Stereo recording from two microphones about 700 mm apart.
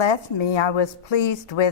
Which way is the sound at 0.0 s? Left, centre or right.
Left.